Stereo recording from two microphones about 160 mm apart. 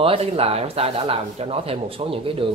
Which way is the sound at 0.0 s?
35° right (ahead or behind).